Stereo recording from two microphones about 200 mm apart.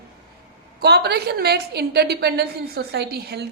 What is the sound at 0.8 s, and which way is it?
A woman's voice, 55° right (ahead or behind).